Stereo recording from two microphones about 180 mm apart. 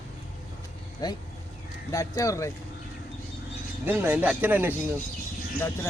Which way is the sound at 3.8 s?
10° right (ahead or behind).